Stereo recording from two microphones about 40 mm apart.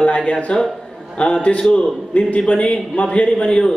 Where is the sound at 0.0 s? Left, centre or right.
Left.